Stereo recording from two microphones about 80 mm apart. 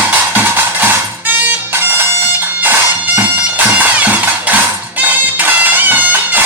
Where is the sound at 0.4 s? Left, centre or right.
Right.